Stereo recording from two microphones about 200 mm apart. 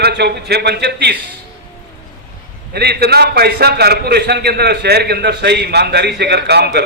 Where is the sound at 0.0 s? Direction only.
55° right (ahead or behind).